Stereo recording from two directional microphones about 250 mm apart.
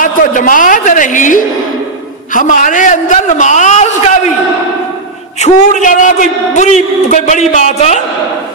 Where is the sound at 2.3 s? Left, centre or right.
Left.